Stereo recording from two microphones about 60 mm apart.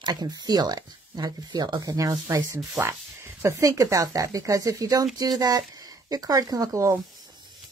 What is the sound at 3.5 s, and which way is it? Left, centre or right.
Speech, right.